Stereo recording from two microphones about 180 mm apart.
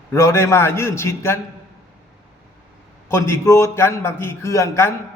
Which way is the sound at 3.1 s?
15° left (ahead or behind).